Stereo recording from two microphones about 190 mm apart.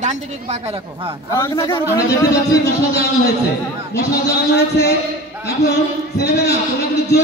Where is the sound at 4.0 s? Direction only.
60° left (ahead or behind).